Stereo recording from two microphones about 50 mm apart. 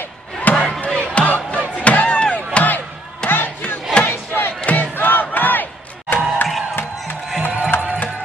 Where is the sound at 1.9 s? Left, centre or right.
Left.